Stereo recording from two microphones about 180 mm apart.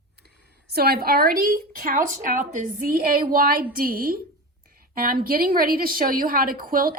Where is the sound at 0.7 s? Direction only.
60° right (ahead or behind).